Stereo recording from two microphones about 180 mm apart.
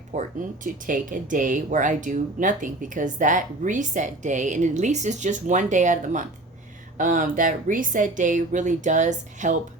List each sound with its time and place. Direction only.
0.1 s speech: 45° right (ahead or behind)